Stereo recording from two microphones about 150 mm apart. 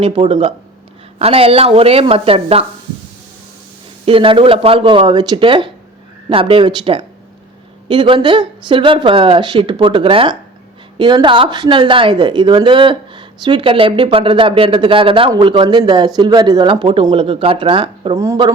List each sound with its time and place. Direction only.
0.0 s speech: 35° right (ahead or behind)
4.0 s speech: 35° right (ahead or behind)